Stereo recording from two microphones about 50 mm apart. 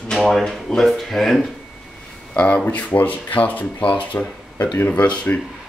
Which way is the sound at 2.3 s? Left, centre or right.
Left.